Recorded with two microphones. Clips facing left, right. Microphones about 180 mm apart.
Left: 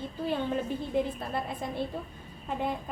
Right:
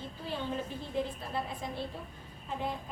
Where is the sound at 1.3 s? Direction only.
55° left (ahead or behind).